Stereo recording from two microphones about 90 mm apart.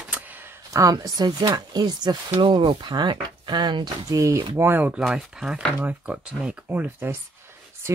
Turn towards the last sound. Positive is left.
turn(degrees=-20)  # may be behind; listen again after turning